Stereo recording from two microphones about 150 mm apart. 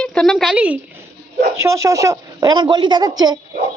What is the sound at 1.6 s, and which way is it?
A woman's voice, 20° right (ahead or behind).